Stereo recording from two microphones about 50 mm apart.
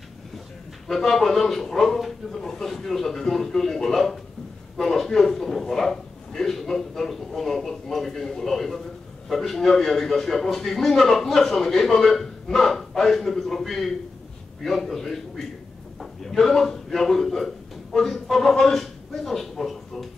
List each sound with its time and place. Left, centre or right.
0.8 s a man's voice: centre